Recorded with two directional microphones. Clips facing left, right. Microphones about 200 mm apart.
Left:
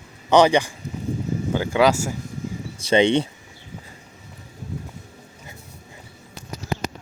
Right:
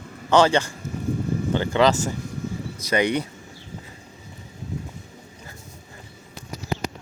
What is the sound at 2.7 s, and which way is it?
Speech, 25° left (ahead or behind).